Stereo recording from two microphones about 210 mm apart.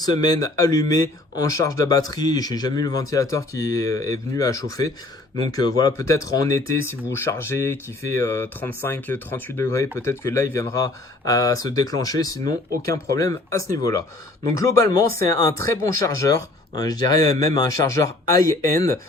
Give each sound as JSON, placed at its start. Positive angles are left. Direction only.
{"t": 0.0, "sound": "speech", "side_deg": 20}